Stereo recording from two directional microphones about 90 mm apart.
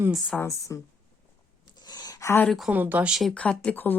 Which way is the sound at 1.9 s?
50° left (ahead or behind).